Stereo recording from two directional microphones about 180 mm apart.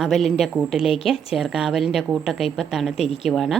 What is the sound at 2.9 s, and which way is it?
Speech, 35° left (ahead or behind).